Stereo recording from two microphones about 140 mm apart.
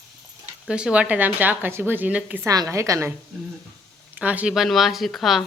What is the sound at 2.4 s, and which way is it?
Speech, 25° right (ahead or behind).